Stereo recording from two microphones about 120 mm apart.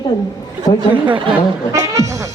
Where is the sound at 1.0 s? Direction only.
45° right (ahead or behind).